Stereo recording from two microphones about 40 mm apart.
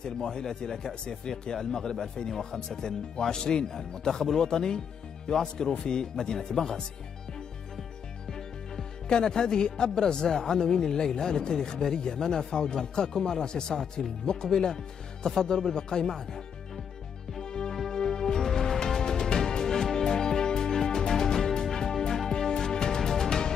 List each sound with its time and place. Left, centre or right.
0.0 s speech: centre
8.3 s speech: centre
17.4 s music: centre